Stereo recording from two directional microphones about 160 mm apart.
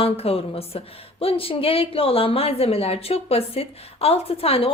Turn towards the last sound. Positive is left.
turn(degrees=35)  # may be behind; listen again after turning